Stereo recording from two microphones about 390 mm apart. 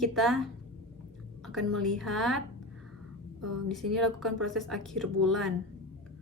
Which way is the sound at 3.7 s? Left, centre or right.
Centre.